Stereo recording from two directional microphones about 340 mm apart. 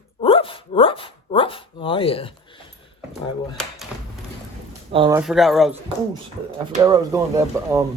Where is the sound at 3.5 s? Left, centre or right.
Centre.